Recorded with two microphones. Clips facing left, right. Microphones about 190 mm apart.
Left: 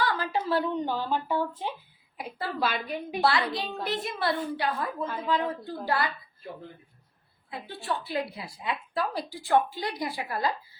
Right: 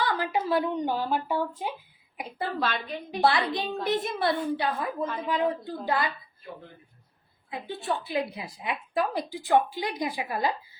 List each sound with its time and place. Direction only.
0.0 s speech: 20° right (ahead or behind)
2.2 s a woman's voice: 10° left (ahead or behind)
3.2 s a woman's voice: 20° right (ahead or behind)
7.5 s a woman's voice: 20° right (ahead or behind)